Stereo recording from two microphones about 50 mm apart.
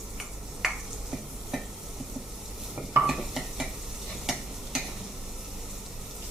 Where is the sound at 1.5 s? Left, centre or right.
Centre.